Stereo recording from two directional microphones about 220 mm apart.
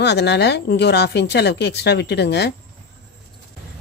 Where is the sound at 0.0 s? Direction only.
50° left (ahead or behind).